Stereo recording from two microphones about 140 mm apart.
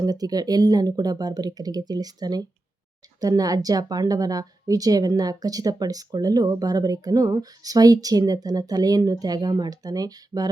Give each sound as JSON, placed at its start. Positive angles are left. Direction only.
{"t": 0.0, "sound": "a woman's voice", "side_deg": -25}